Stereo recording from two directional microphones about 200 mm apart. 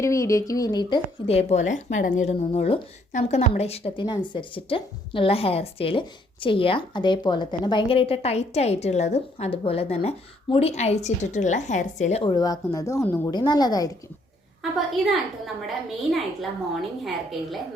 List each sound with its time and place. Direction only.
0.0 s speech: 15° left (ahead or behind); by 12.3 s 35° left (ahead or behind)
12.3 s speech: 20° left (ahead or behind)
14.6 s a woman's voice: centre (ahead or behind)